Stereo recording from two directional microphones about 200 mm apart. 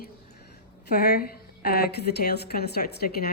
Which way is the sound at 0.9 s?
50° left (ahead or behind).